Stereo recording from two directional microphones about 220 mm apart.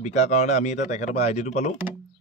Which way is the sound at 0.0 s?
30° left (ahead or behind).